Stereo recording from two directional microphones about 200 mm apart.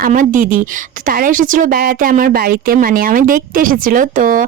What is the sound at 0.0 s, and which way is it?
A woman's voice, 40° right (ahead or behind).